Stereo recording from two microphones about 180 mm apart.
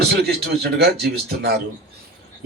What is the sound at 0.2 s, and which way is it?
A man's voice, 60° right (ahead or behind).